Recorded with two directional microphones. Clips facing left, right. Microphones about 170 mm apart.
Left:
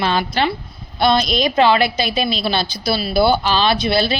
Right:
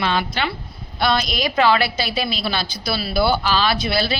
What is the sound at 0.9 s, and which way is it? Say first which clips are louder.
A woman's voice: left 5 dB; 25° left (ahead or behind).